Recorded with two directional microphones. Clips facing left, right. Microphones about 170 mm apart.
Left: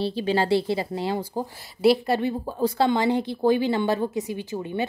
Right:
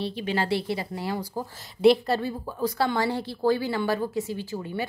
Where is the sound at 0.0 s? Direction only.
30° left (ahead or behind).